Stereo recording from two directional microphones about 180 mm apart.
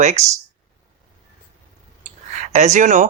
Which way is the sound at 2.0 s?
40° right (ahead or behind).